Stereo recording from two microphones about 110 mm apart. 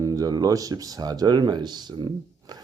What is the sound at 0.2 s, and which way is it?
Speech, 35° right (ahead or behind).